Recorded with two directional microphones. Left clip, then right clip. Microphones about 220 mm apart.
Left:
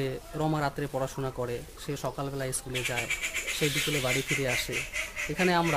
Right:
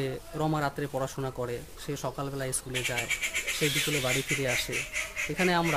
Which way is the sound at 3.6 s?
Centre (ahead or behind).